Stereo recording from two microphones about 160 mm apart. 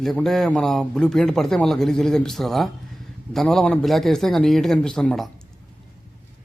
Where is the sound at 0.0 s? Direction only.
Centre (ahead or behind).